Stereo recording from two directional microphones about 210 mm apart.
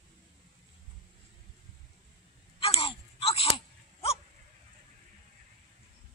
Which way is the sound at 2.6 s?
25° left (ahead or behind).